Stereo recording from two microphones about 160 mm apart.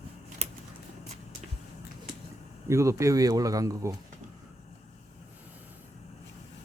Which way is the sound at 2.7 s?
20° right (ahead or behind).